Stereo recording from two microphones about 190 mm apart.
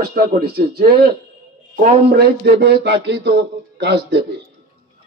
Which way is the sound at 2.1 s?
55° right (ahead or behind).